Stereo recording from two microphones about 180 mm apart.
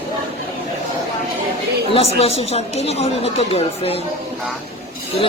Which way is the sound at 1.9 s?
35° left (ahead or behind).